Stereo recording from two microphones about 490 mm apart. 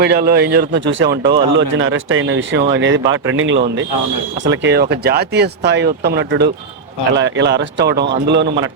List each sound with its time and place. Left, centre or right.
0.0 s speech: centre